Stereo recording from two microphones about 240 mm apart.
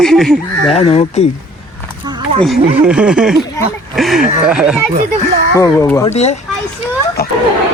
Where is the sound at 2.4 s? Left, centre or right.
Centre.